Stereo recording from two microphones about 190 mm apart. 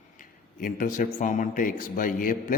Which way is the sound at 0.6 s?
45° left (ahead or behind).